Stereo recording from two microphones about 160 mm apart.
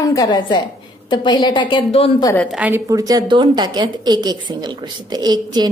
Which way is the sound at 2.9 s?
20° right (ahead or behind).